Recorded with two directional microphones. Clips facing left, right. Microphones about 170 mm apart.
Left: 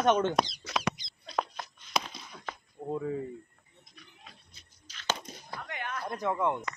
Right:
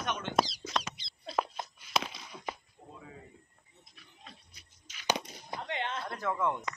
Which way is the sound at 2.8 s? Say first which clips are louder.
Left 17 dB; 60° left (ahead or behind).